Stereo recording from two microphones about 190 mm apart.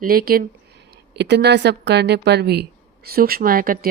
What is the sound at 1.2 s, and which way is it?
A woman's voice, 60° right (ahead or behind).